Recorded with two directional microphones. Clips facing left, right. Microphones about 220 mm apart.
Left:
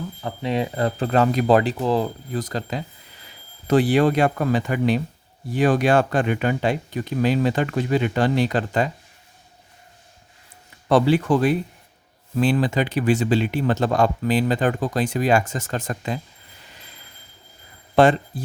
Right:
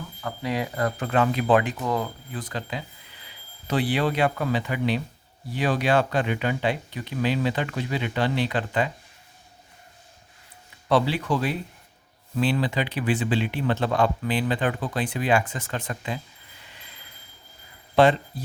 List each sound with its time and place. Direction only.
0.2 s speech: 25° left (ahead or behind); by 8.9 s 40° left (ahead or behind)
10.8 s speech: 45° left (ahead or behind)
17.9 s speech: 50° left (ahead or behind)